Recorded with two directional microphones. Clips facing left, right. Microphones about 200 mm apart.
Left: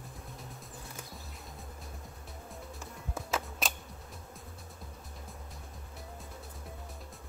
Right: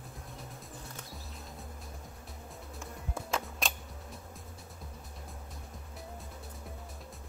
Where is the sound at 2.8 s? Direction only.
5° left (ahead or behind).